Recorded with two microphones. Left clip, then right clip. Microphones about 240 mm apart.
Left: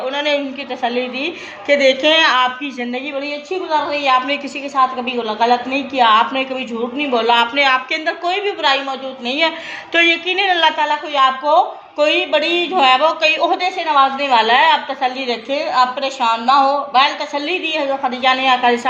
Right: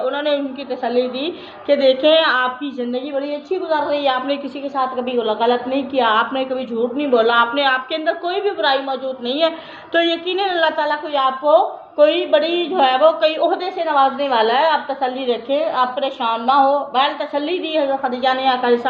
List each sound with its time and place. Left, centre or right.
0.2 s a sound: left
0.9 s a woman's voice: left
3.7 s a woman's voice: left
7.5 s a woman's voice: left
11.1 s a woman's voice: left
13.2 s speech: left
13.7 s a woman's voice: left